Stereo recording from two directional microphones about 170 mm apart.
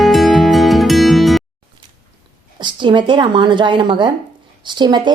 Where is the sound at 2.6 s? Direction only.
30° right (ahead or behind).